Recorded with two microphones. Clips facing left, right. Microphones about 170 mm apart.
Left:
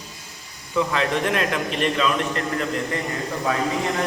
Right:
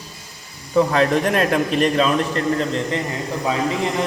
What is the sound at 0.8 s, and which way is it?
A man's voice, 40° right (ahead or behind).